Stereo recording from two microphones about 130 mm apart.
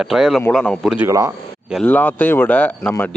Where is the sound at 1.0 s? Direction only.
25° right (ahead or behind).